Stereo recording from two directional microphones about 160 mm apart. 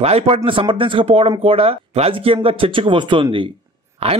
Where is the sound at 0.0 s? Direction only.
40° right (ahead or behind).